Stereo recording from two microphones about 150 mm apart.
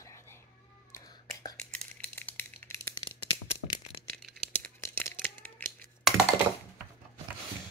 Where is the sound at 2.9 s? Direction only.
30° left (ahead or behind).